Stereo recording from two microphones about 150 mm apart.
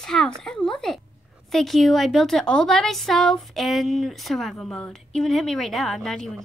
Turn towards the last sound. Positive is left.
turn(degrees=5)  # may be behind; listen again after turning